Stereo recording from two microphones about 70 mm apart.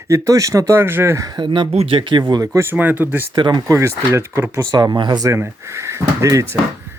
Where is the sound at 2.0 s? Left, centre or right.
Right.